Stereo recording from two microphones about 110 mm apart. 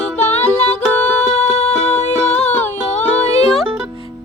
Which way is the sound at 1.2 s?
90° left.